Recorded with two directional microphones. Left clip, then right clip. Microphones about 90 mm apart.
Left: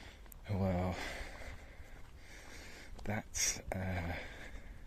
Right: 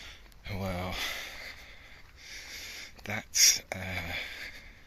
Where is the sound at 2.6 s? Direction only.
50° left (ahead or behind).